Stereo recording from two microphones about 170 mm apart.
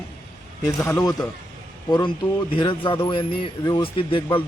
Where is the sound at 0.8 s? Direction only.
20° left (ahead or behind).